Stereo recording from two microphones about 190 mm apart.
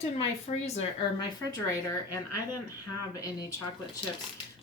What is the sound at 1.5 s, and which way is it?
Speech, 15° left (ahead or behind).